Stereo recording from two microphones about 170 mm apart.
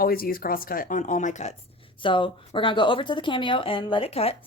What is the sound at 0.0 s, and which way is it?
Speech, 60° left (ahead or behind).